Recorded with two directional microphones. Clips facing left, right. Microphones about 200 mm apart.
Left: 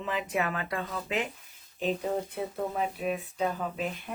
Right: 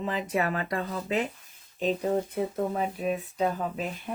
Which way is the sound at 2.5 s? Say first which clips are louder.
Right 3 dB; 40° right (ahead or behind).